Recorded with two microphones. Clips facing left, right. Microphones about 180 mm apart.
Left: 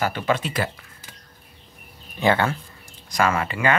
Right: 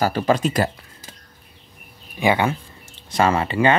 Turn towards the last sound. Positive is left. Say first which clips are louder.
# right 4 dB
turn(degrees=-30)  # may be behind; listen again after turning